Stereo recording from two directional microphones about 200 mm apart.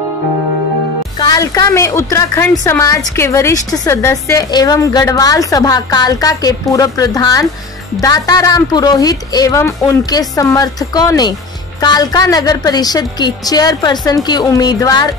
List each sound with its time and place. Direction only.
1.2 s a woman's voice: 20° left (ahead or behind)